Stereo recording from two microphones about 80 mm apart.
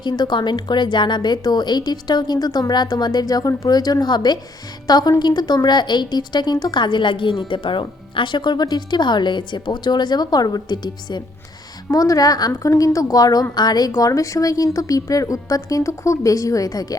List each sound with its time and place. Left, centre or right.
0.0 s a woman's voice: left
11.9 s a woman's voice: left